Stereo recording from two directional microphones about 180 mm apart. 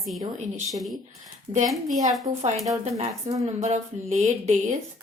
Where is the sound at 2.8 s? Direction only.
40° right (ahead or behind).